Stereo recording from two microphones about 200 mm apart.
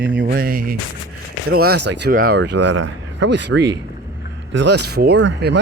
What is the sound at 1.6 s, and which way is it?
Speech, 60° right (ahead or behind).